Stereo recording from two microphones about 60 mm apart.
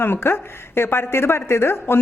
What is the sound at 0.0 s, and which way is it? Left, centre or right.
A woman's voice, left.